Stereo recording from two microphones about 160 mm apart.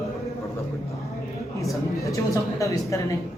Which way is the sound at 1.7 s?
20° left (ahead or behind).